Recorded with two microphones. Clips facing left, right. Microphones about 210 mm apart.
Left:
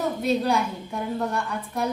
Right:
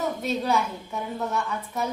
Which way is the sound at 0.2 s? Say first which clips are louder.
Left 5 dB; centre (ahead or behind).